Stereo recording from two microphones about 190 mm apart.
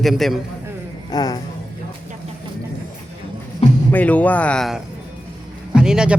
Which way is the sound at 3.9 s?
10° left (ahead or behind).